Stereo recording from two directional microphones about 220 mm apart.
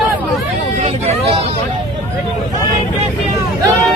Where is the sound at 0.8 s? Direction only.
30° right (ahead or behind).